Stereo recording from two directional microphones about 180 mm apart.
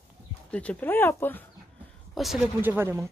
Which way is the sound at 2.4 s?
10° right (ahead or behind).